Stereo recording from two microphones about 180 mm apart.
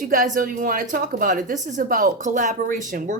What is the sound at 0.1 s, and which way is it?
Speech, 45° right (ahead or behind).